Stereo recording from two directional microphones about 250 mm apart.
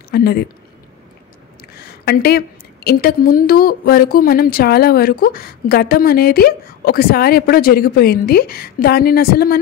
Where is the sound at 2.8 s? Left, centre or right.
Left.